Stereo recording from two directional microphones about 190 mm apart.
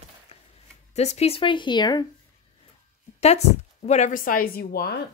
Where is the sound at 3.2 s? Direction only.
35° left (ahead or behind); by 5.0 s 55° left (ahead or behind).